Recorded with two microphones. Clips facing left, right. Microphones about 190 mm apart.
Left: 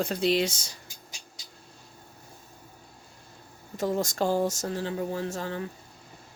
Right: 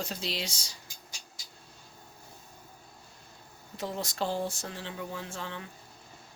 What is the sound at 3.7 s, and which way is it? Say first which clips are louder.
Speech: left 7 dB; 45° left (ahead or behind).